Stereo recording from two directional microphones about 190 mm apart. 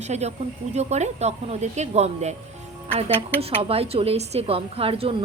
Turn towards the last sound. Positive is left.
turn(degrees=-30)  # may be behind; listen again after turning